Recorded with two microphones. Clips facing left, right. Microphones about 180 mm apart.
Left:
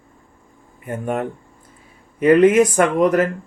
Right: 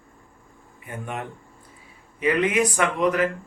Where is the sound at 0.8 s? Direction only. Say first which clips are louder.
Left 10 dB; 50° left (ahead or behind).